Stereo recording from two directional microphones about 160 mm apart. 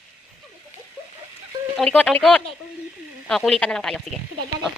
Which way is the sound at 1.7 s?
5° left (ahead or behind).